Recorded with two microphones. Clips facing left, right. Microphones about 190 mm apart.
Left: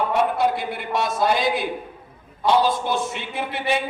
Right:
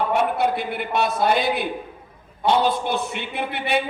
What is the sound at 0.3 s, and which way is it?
A man's voice, 60° right (ahead or behind).